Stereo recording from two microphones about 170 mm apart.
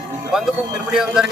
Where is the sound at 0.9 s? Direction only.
5° right (ahead or behind).